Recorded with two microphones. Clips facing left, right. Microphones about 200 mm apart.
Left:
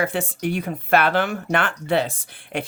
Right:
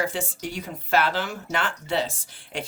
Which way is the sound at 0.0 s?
60° left (ahead or behind).